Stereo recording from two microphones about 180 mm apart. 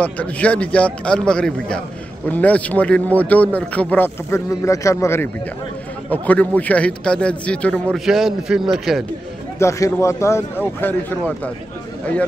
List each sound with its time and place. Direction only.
0.0 s a man's voice: 10° left (ahead or behind)
9.6 s a man's voice: 15° left (ahead or behind)